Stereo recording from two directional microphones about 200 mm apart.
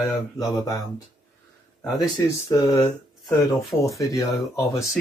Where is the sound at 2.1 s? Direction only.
15° left (ahead or behind).